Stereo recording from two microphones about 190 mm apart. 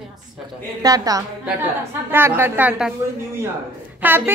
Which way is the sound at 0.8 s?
20° right (ahead or behind).